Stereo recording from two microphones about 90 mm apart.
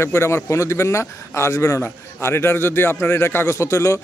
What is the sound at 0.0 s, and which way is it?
A man's voice, 30° left (ahead or behind).